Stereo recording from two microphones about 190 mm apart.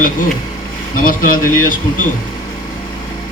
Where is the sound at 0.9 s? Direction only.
45° left (ahead or behind).